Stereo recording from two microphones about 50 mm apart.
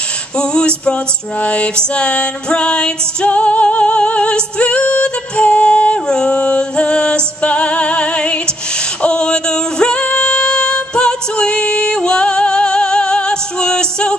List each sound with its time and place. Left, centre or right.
0.4 s music: centre